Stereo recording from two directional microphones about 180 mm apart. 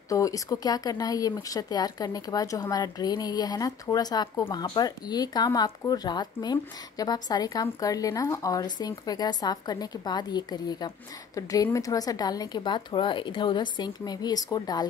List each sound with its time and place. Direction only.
0.1 s speech: 20° left (ahead or behind)